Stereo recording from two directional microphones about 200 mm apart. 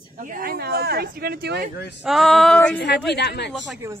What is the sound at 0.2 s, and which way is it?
Speech, 45° right (ahead or behind).